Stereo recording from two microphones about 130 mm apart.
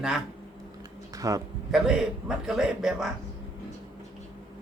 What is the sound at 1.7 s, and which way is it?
A man's voice, 5° right (ahead or behind).